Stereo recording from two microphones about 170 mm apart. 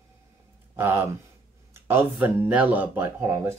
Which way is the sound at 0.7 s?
10° right (ahead or behind).